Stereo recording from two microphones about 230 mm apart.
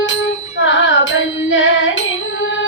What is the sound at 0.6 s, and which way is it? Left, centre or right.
Carnatic music, left.